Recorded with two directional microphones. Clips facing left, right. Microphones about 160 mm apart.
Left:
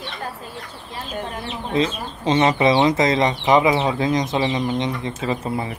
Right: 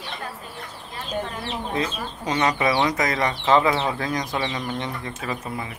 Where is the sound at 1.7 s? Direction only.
25° left (ahead or behind).